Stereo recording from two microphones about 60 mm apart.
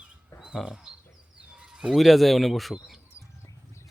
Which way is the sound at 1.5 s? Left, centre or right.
Centre.